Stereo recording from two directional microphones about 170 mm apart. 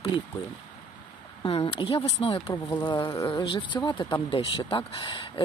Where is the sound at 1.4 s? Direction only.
30° left (ahead or behind).